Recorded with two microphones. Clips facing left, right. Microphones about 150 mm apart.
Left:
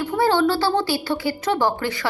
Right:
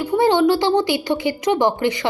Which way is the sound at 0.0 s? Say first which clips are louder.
Right 3 dB; 15° right (ahead or behind).